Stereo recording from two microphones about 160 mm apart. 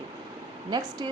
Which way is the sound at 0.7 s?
25° right (ahead or behind).